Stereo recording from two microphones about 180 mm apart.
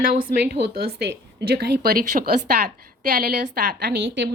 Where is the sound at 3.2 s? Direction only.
55° right (ahead or behind); by 4.3 s 75° right (ahead or behind).